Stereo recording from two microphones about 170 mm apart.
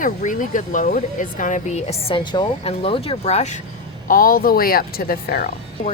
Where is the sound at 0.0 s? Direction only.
50° left (ahead or behind).